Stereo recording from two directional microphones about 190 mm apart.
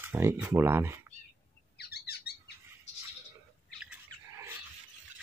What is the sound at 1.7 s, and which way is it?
Bird, 55° left (ahead or behind).